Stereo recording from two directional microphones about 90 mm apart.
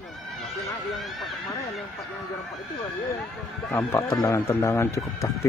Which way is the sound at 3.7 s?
30° left (ahead or behind).